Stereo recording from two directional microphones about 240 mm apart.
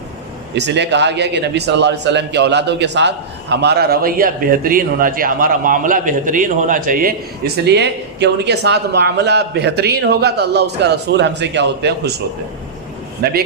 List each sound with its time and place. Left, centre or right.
0.5 s a man's voice: right
13.2 s a man's voice: right